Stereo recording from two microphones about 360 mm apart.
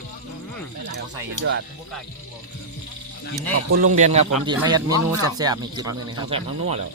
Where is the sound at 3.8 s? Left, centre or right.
Right.